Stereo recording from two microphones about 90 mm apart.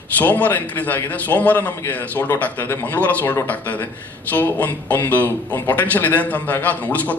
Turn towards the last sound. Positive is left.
turn(degrees=15)  # may be behind; listen again after turning